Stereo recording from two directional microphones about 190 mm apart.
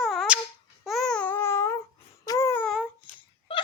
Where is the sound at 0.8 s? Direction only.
Centre (ahead or behind).